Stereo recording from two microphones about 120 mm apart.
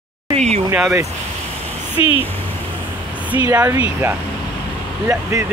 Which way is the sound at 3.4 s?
20° right (ahead or behind).